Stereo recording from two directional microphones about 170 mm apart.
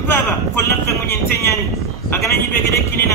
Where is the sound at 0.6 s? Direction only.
15° left (ahead or behind).